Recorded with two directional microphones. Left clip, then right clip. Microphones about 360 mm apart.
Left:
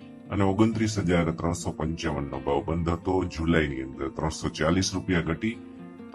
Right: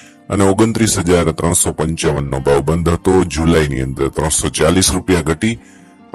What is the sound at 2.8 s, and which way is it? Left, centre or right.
Speech, right.